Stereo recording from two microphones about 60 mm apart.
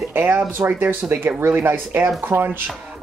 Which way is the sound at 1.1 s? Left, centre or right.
Right.